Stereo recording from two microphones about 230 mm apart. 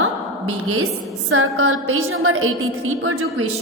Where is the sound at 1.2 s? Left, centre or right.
Right.